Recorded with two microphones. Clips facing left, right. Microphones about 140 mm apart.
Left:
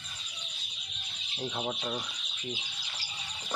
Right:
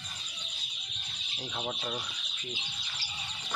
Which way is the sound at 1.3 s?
20° left (ahead or behind).